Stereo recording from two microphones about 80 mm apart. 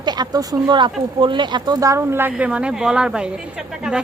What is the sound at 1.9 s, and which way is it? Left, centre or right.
Speech, right.